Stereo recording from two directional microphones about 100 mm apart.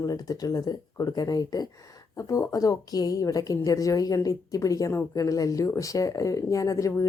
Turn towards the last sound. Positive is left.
turn(degrees=35)  # may be behind; listen again after turning